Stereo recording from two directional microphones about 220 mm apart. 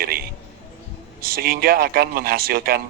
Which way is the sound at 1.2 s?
40° right (ahead or behind).